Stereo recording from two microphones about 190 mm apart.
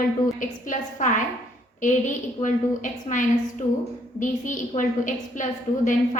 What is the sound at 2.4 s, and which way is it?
A woman's voice, 40° left (ahead or behind).